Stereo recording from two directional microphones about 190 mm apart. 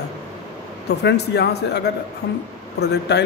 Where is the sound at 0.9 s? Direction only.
60° left (ahead or behind).